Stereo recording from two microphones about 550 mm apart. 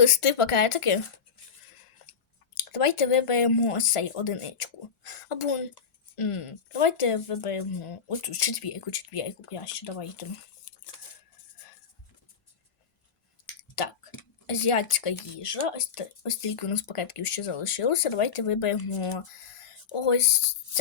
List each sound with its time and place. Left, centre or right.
0.0 s speech: left
2.7 s speech: left
13.8 s speech: left